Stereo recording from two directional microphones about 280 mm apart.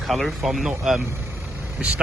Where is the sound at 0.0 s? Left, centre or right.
Centre.